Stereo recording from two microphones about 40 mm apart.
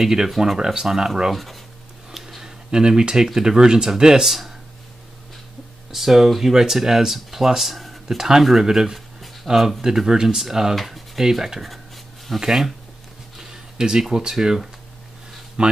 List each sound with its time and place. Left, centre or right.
0.0 s speech: centre
1.3 s speech: centre
2.4 s speech: centre
5.9 s speech: centre
10.8 s speech: centre
11.1 s speech: centre
13.4 s a sound: centre
14.1 s speech: centre
15.6 s a man's voice: right